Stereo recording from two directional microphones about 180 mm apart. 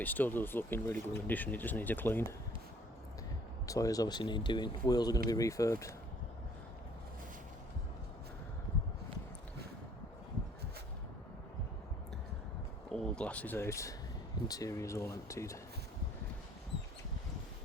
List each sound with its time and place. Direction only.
0.0 s speech: 10° left (ahead or behind)
3.7 s speech: 20° left (ahead or behind)
12.9 s speech: 5° left (ahead or behind)